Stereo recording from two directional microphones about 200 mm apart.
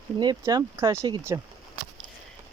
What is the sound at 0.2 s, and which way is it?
Speech, 20° right (ahead or behind).